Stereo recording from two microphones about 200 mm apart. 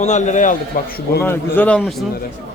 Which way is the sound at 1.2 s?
10° left (ahead or behind).